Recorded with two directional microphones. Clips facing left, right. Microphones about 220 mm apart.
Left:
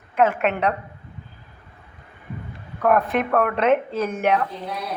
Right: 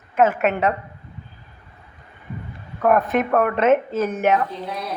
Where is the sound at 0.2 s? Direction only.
5° right (ahead or behind).